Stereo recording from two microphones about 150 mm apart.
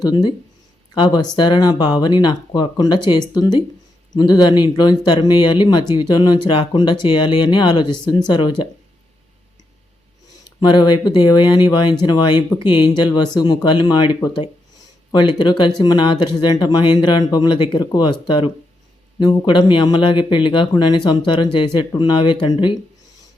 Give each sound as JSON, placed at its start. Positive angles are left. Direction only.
{"t": 0.0, "sound": "speech", "side_deg": 30}
{"t": 10.6, "sound": "speech", "side_deg": 30}